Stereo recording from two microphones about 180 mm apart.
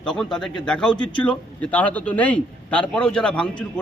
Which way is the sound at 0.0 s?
5° left (ahead or behind).